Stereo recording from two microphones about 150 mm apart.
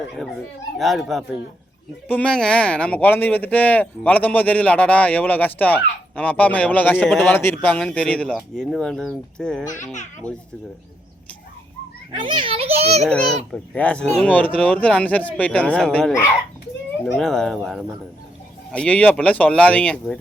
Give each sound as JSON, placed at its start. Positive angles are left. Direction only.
{"t": 0.8, "sound": "speech", "side_deg": 0}
{"t": 9.9, "sound": "a child's voice", "side_deg": 55}
{"t": 12.1, "sound": "a child's voice", "side_deg": -35}
{"t": 13.1, "sound": "speech", "side_deg": 10}
{"t": 17.2, "sound": "speech", "side_deg": 5}